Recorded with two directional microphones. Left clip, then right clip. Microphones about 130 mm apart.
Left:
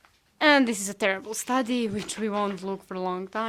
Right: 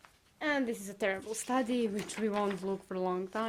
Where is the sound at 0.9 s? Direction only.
35° left (ahead or behind).